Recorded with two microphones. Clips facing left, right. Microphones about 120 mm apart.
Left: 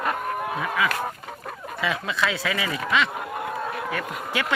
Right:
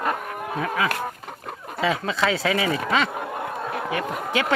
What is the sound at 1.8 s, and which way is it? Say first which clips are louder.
Speech: right 3 dB; 30° right (ahead or behind).